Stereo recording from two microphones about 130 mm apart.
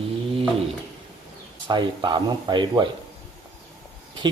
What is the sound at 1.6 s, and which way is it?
Speech, 35° right (ahead or behind).